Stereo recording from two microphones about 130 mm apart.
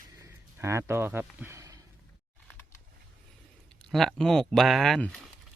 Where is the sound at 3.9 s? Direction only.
Centre (ahead or behind).